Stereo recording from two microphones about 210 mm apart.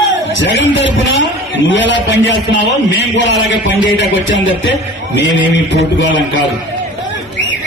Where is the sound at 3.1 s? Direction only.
60° left (ahead or behind).